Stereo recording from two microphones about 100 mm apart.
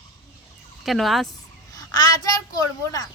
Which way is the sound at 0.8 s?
Centre (ahead or behind).